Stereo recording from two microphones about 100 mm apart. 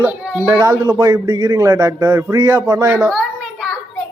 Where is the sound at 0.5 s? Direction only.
30° right (ahead or behind).